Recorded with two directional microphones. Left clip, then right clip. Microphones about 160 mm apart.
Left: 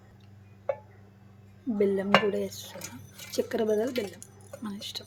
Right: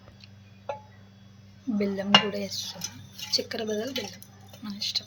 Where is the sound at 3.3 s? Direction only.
55° left (ahead or behind).